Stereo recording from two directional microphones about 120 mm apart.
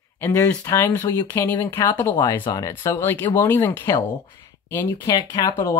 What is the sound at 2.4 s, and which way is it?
Speech, 35° left (ahead or behind).